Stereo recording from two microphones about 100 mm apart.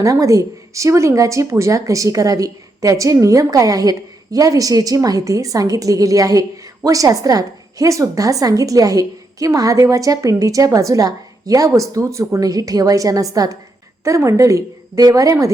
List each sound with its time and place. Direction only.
0.0 s a woman's voice: 35° right (ahead or behind)